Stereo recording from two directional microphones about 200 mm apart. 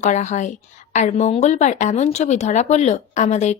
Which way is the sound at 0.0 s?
35° left (ahead or behind).